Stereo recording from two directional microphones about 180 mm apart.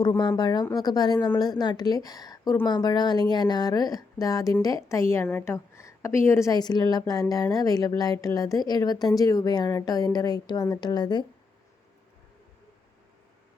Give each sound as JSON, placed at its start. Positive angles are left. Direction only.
{"t": 0.0, "sound": "a woman's voice", "side_deg": 25}